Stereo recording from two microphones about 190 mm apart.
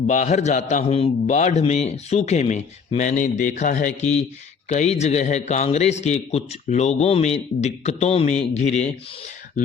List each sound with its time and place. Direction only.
0.1 s a man's voice: 35° left (ahead or behind)